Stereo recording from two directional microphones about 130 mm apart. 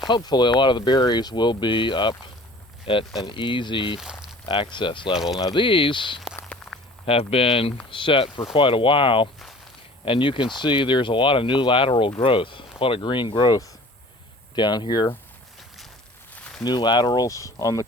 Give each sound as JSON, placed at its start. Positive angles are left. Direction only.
{"t": 0.1, "sound": "speech", "side_deg": 35}
{"t": 4.0, "sound": "a sound", "side_deg": -5}
{"t": 4.4, "sound": "speech", "side_deg": 40}
{"t": 5.1, "sound": "speech", "side_deg": 0}
{"t": 5.4, "sound": "speech", "side_deg": 35}
{"t": 6.4, "sound": "walk", "side_deg": 0}
{"t": 7.0, "sound": "speech", "side_deg": 45}
{"t": 16.3, "sound": "a sound", "side_deg": 10}
{"t": 16.6, "sound": "speech", "side_deg": 35}